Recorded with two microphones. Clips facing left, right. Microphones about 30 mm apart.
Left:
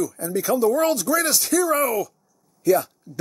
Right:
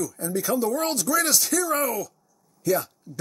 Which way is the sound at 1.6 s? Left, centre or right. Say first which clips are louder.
Left 4 dB; left.